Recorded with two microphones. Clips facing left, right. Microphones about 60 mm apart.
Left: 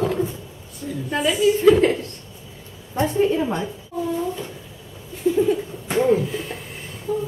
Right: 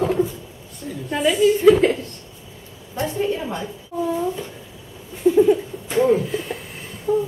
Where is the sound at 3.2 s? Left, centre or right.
Centre.